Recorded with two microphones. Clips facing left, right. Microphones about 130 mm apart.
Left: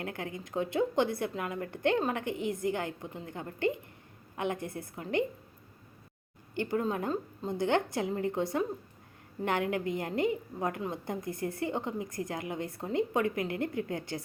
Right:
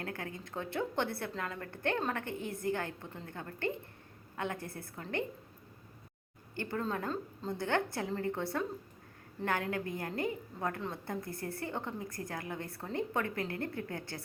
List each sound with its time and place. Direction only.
0.0 s a woman's voice: 20° left (ahead or behind)
6.6 s a woman's voice: 15° left (ahead or behind)